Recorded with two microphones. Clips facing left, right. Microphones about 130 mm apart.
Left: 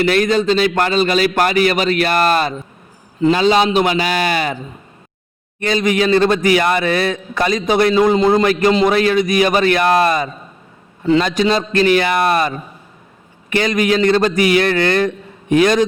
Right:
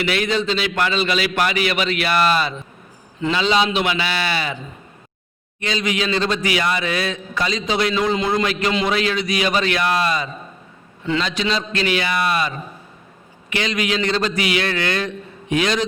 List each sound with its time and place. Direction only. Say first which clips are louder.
0.0 s a man's voice: left 6 dB; 45° left (ahead or behind)
5.5 s a man's voice: left 7 dB; 50° left (ahead or behind)